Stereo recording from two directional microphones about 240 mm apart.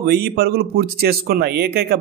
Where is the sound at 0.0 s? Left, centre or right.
Right.